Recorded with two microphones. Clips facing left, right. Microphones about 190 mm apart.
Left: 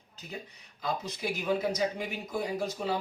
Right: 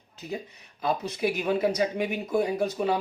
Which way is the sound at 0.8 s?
60° right (ahead or behind).